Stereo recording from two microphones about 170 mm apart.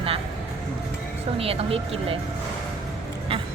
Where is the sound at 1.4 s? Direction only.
35° right (ahead or behind).